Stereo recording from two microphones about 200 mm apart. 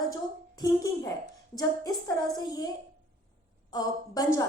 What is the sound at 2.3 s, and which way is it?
Speech, 20° left (ahead or behind).